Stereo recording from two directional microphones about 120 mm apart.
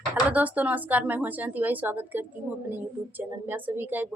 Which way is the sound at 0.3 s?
15° right (ahead or behind).